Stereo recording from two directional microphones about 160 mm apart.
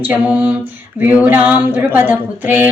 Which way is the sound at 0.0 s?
10° right (ahead or behind).